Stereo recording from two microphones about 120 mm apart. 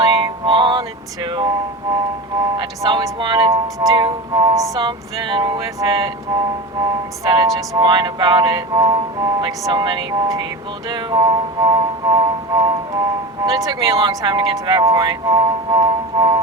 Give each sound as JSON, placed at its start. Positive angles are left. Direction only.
{"t": 0.0, "sound": "music", "side_deg": -30}
{"t": 0.4, "sound": "music", "side_deg": -40}
{"t": 2.6, "sound": "music", "side_deg": -35}
{"t": 7.3, "sound": "speech", "side_deg": -35}